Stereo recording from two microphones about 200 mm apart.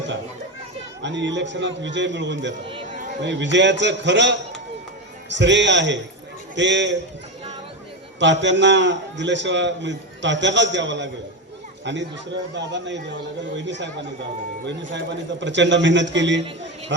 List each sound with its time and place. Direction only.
1.0 s a man's voice: 65° right (ahead or behind)
8.2 s a man's voice: 65° right (ahead or behind)
12.5 s a man's voice: 60° right (ahead or behind)